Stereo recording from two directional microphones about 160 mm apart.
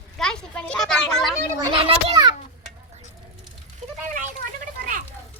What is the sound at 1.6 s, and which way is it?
Speech, 30° right (ahead or behind).